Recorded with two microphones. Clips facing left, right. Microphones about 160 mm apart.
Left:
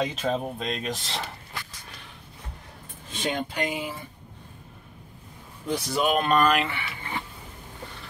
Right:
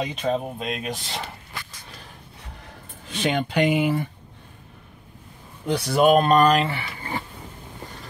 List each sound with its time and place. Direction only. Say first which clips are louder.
0.0 s speech: right 2 dB; centre (ahead or behind)
3.1 s speech: right 5 dB; 80° right
5.7 s speech: right 6 dB; 70° right (ahead or behind)
6.0 s speech: right 6 dB; 40° right (ahead or behind)